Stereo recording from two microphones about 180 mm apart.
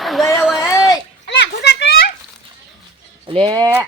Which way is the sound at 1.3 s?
70° left (ahead or behind).